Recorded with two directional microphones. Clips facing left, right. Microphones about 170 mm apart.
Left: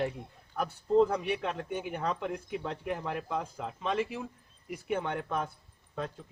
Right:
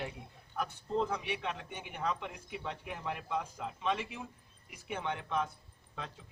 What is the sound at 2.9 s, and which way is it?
Speech, 45° left (ahead or behind).